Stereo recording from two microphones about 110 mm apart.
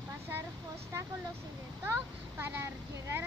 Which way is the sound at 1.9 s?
20° right (ahead or behind).